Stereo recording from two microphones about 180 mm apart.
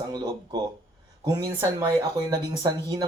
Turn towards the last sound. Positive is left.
turn(degrees=-20)  # may be behind; listen again after turning